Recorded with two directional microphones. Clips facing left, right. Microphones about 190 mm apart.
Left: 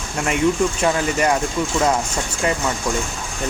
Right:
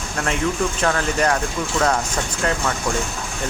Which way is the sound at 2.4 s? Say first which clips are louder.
Left 2 dB; 10° left (ahead or behind).